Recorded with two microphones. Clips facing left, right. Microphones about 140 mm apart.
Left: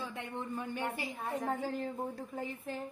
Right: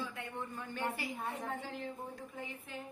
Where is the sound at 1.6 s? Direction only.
45° left (ahead or behind).